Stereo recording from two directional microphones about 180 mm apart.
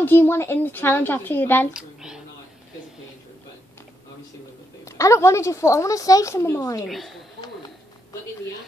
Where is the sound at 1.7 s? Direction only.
5° right (ahead or behind).